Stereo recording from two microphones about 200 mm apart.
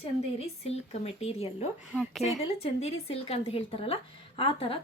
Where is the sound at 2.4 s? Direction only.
30° left (ahead or behind).